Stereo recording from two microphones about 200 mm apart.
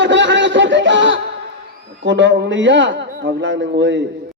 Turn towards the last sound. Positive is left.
turn(degrees=-65)  # may be behind; listen again after turning